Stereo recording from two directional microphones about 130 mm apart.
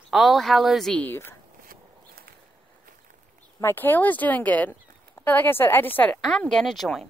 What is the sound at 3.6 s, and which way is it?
Speech, 15° left (ahead or behind).